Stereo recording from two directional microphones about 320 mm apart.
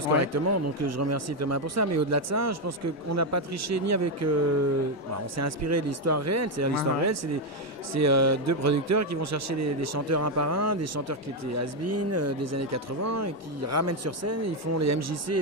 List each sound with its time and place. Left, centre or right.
0.1 s a man's voice: right